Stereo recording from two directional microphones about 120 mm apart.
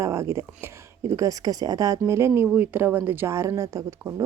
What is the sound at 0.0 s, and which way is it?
A woman's voice, 25° right (ahead or behind).